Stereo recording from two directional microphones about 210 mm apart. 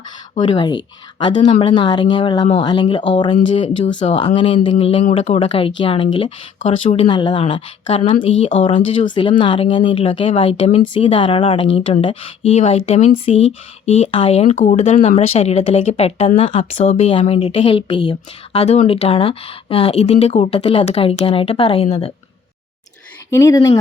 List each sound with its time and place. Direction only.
0.3 s speech: 20° left (ahead or behind)
3.3 s speech: 35° left (ahead or behind)
23.3 s speech: 15° left (ahead or behind)